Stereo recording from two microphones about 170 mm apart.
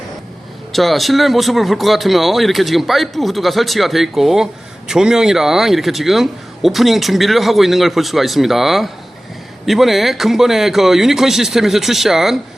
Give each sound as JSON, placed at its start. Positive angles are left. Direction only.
{"t": 0.7, "sound": "speech", "side_deg": 0}